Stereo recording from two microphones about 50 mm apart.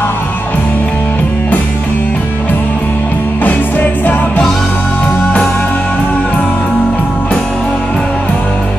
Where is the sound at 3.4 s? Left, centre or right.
Left.